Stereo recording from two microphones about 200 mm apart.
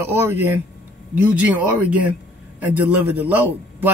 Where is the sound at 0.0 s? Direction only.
10° right (ahead or behind).